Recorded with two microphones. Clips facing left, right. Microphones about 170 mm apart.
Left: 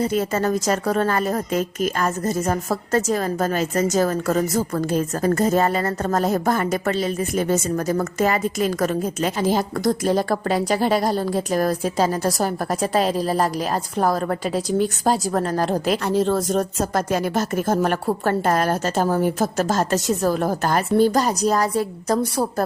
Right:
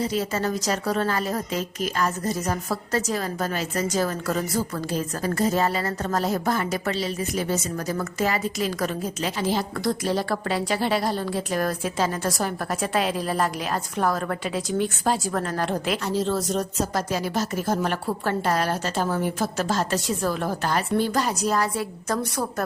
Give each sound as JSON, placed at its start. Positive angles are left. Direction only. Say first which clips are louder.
{"t": 0.0, "sound": "a woman's voice", "louder": "left 4 dB", "side_deg": 50}
{"t": 16.0, "sound": "a woman's voice", "louder": "left 5 dB", "side_deg": 55}